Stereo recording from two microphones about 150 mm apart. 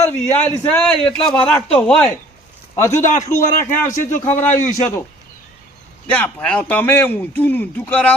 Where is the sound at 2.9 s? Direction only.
55° left (ahead or behind).